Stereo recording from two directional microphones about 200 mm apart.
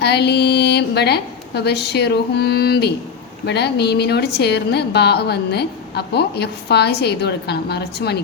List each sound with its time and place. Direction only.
0.0 s a woman's voice: 55° left (ahead or behind)